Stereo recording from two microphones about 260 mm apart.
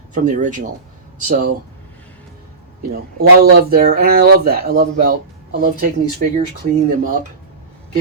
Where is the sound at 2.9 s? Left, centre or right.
Right.